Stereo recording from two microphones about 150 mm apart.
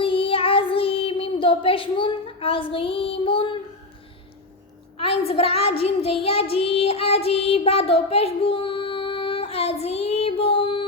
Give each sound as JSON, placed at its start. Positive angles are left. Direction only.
{"t": 0.0, "sound": "child singing", "side_deg": 35}
{"t": 5.2, "sound": "child singing", "side_deg": 40}